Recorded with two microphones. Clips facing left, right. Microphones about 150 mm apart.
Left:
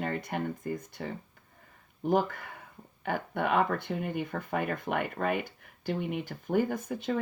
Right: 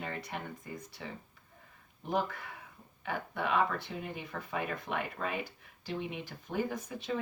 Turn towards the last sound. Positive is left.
turn(degrees=55)  # may be behind; listen again after turning